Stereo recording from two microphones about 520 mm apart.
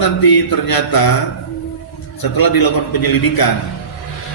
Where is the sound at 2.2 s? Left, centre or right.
Left.